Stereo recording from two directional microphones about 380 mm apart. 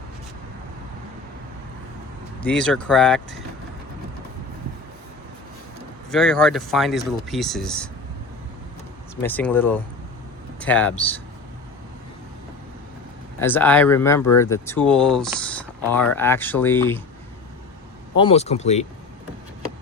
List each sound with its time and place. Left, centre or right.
2.4 s speech: centre
6.1 s speech: centre
9.2 s speech: centre
13.4 s speech: centre
18.2 s speech: centre